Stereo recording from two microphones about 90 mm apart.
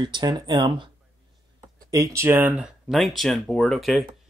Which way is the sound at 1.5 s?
35° right (ahead or behind).